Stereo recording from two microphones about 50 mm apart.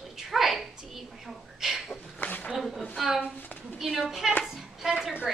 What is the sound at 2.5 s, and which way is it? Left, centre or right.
A woman's voice, centre.